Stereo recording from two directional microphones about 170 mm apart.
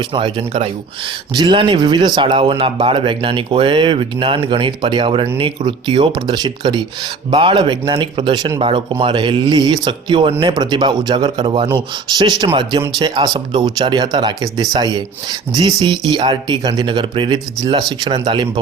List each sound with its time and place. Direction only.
0.1 s speech: 30° right (ahead or behind)